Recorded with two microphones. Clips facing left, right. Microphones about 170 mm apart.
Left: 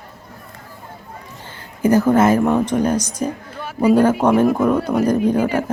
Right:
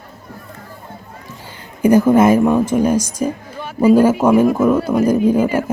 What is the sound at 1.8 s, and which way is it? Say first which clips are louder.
Speech: right 3 dB; 15° right (ahead or behind).